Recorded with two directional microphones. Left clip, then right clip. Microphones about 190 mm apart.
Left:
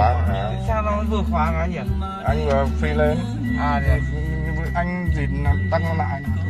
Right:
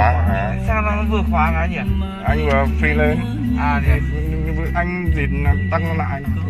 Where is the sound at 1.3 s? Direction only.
30° left (ahead or behind).